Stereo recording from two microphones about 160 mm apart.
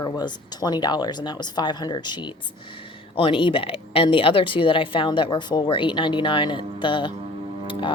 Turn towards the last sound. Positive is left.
turn(degrees=30)  # may be behind; listen again after turning